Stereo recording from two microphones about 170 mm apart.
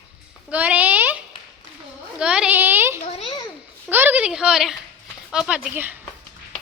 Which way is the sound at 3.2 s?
30° left (ahead or behind).